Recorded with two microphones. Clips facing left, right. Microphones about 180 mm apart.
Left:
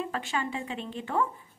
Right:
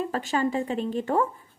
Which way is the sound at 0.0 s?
40° right (ahead or behind).